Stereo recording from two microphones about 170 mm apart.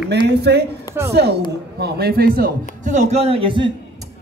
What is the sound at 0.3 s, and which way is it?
A man's voice, 75° right (ahead or behind).